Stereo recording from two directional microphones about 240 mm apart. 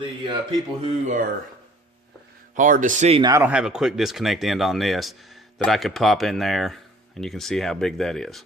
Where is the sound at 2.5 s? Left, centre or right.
Right; by 8.4 s centre.